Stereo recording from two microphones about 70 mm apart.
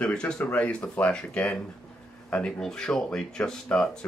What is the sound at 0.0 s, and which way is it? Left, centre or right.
Speech, centre.